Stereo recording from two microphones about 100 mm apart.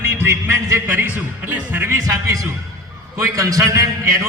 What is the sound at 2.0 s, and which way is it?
A man's voice, 35° right (ahead or behind).